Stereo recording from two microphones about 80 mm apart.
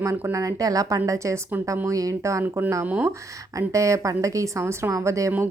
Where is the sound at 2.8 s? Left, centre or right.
Centre.